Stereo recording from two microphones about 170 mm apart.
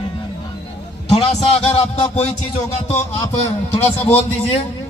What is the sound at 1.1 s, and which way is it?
A man's voice, 35° left (ahead or behind).